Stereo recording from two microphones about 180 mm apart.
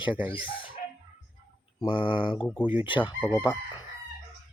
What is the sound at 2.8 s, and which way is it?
Speech, 25° left (ahead or behind).